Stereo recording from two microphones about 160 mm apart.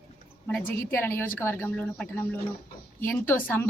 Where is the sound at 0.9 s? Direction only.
15° left (ahead or behind).